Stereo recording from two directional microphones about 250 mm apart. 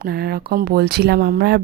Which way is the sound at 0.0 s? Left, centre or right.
Right.